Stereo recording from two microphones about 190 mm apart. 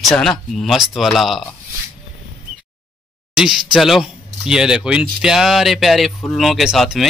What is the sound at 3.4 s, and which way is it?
Speech, centre (ahead or behind).